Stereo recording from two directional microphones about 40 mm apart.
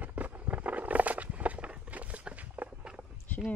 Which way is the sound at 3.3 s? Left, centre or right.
Left.